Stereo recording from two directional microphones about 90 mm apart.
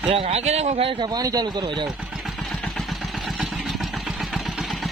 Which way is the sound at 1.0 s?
45° right (ahead or behind).